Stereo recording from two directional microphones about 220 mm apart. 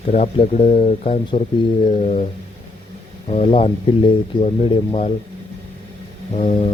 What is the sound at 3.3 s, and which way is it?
Speech, 25° left (ahead or behind).